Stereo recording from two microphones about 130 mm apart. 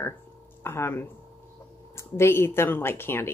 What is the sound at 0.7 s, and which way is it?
A woman's voice, 20° left (ahead or behind).